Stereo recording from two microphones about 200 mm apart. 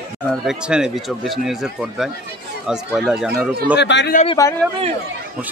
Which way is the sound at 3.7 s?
60° left (ahead or behind).